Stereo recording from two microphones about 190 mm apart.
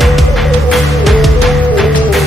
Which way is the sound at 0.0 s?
Centre (ahead or behind).